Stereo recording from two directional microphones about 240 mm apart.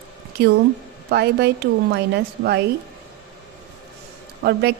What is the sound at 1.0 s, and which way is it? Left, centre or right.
A woman's voice, right.